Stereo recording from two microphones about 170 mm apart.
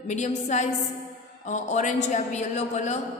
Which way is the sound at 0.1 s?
45° left (ahead or behind).